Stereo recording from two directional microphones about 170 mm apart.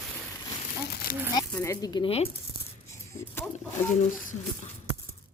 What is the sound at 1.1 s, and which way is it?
Speech, 60° left (ahead or behind).